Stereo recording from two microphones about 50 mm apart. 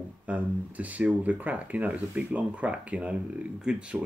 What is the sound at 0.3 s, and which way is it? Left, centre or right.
Speech, right.